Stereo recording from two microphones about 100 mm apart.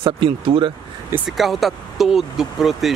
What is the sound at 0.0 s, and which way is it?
Speech, 60° right (ahead or behind).